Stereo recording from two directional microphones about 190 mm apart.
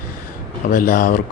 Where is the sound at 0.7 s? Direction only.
45° left (ahead or behind).